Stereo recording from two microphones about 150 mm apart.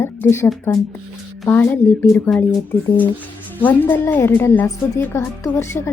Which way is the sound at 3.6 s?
10° left (ahead or behind).